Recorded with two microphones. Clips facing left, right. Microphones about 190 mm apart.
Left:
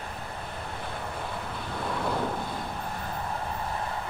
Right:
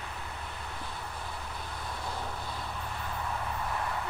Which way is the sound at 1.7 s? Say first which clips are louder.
Left 11 dB; 65° left (ahead or behind).